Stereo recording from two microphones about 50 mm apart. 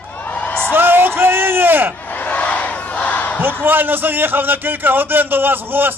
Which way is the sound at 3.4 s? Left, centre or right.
Right.